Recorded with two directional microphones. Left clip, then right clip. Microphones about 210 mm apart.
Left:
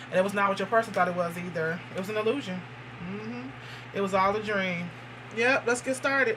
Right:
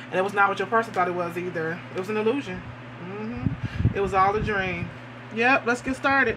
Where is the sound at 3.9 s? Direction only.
40° right (ahead or behind).